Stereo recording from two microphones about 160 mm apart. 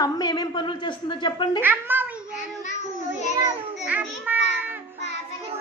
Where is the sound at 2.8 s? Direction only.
45° left (ahead or behind).